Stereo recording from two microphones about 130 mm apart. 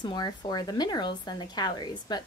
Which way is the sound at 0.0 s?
35° left (ahead or behind).